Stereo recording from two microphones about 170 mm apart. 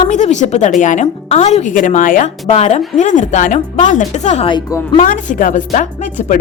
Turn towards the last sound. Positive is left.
turn(degrees=45)  # may be behind; listen again after turning